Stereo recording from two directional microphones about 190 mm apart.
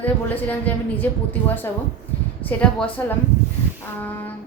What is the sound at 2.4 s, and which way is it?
A woman's voice, 10° left (ahead or behind).